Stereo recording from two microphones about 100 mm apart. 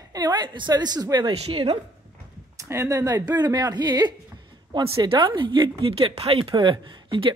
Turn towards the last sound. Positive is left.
turn(degrees=-55)  # may be behind; listen again after turning